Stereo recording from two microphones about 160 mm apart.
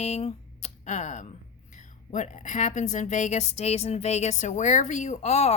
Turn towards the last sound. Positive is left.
turn(degrees=45)  # may be behind; listen again after turning